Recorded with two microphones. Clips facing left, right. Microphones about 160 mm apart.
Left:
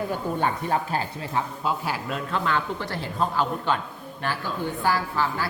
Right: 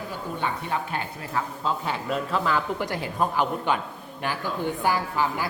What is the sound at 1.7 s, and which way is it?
Speech, 5° left (ahead or behind).